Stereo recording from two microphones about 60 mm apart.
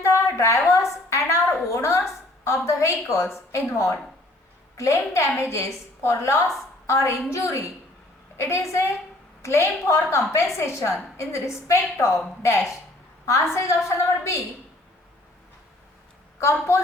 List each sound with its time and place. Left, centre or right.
0.0 s a sound: left
1.6 s a woman's voice: left
16.4 s a woman's voice: left